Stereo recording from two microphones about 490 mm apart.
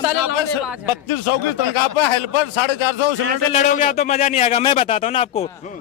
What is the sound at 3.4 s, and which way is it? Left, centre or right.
A man's voice, centre.